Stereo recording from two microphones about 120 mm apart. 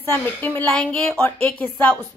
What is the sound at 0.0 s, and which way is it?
A woman's voice, 15° left (ahead or behind).